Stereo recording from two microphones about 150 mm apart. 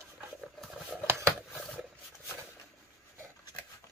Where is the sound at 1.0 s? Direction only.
15° right (ahead or behind).